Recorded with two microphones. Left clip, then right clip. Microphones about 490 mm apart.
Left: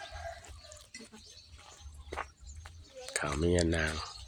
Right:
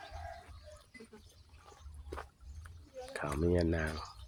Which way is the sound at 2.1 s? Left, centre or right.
Right.